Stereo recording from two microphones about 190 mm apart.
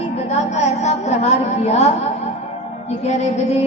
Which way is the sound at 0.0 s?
35° left (ahead or behind).